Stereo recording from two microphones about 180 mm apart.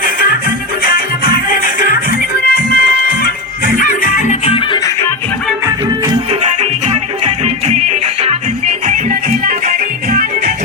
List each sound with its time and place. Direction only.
0.9 s music: 55° left (ahead or behind)
2.4 s music: 55° left (ahead or behind); by 4.8 s 30° left (ahead or behind)
6.4 s music: 35° right (ahead or behind)